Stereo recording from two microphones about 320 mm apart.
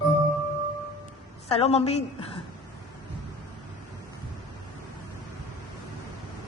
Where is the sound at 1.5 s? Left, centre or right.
Centre.